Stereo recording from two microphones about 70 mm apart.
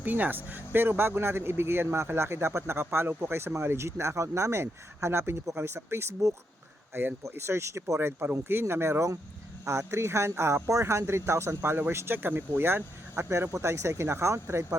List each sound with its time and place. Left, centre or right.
0.0 s speech: right